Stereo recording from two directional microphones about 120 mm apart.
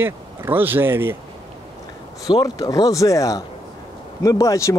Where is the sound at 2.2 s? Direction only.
35° left (ahead or behind).